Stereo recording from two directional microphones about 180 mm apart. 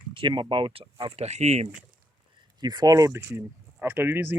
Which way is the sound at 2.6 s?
20° right (ahead or behind).